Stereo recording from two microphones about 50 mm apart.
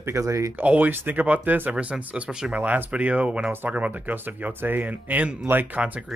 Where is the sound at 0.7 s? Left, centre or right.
Right.